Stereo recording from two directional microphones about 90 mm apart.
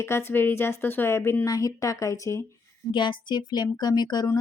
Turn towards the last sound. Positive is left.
turn(degrees=50)  # may be behind; listen again after turning